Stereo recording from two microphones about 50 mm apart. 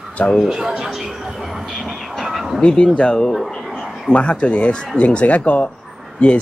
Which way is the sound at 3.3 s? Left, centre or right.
Centre.